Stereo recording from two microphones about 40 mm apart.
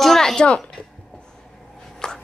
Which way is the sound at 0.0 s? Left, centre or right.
Centre.